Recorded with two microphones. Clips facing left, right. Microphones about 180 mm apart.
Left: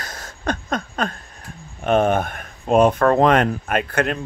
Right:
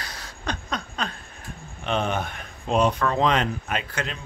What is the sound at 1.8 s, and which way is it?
Speech, 50° left (ahead or behind).